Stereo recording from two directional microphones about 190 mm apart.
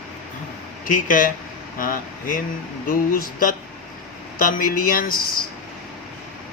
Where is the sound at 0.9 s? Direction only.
45° left (ahead or behind).